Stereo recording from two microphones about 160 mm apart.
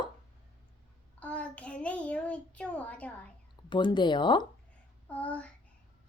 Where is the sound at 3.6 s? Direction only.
30° left (ahead or behind).